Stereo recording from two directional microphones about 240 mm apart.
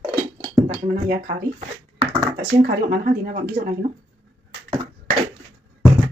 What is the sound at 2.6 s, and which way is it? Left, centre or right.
A woman's voice, right.